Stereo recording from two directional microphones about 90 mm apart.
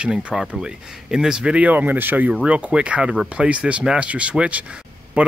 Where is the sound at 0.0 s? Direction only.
10° right (ahead or behind).